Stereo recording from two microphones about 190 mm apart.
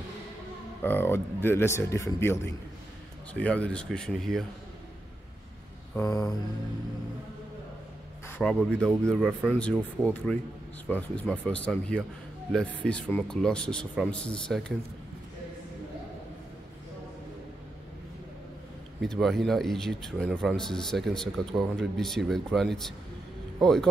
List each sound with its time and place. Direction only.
0.8 s speech: 10° left (ahead or behind)
5.9 s speech: 20° left (ahead or behind)
8.3 s speech: 5° left (ahead or behind)
18.9 s speech: centre (ahead or behind)